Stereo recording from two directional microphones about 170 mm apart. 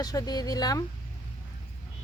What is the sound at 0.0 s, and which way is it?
Speech, 20° left (ahead or behind).